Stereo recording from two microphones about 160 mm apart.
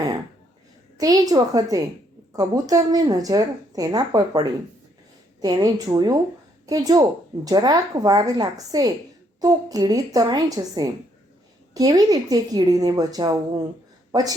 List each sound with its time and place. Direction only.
0.9 s a woman's voice: 25° right (ahead or behind)